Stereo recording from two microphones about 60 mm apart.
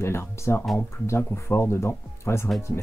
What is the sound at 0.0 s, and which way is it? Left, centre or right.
Speech, left.